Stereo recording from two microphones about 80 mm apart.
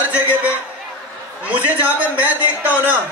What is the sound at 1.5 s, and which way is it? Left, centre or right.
A man's voice, centre.